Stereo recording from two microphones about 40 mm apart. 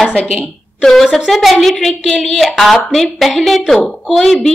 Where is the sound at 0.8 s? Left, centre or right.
Centre.